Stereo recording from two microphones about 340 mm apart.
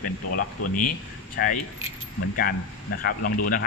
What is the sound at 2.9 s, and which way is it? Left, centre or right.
Speech, left.